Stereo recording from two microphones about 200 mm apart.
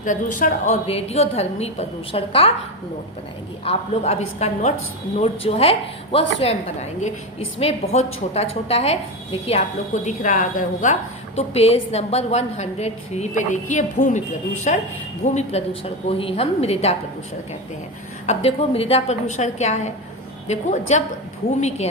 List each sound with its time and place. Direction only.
0.0 s a woman's voice: 40° left (ahead or behind)
3.6 s a woman's voice: 30° left (ahead or behind)
18.3 s a woman's voice: 30° left (ahead or behind)